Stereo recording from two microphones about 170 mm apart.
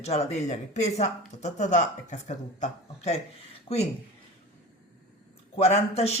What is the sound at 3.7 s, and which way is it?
Speech, 30° left (ahead or behind).